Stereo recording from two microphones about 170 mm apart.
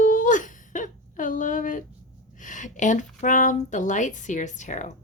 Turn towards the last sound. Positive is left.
turn(degrees=45)  # may be behind; listen again after turning